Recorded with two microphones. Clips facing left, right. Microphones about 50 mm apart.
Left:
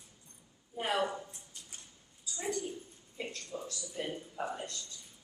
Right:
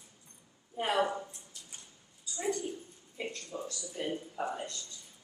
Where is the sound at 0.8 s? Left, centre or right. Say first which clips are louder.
Right 3 dB; centre.